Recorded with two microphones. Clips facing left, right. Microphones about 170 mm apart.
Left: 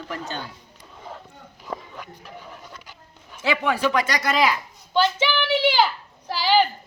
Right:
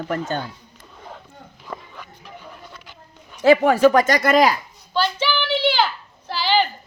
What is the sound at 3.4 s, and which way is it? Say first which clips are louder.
Speech: right 9 dB; 45° right (ahead or behind).